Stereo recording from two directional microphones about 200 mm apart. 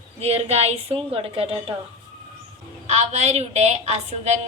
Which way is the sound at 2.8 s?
35° right (ahead or behind).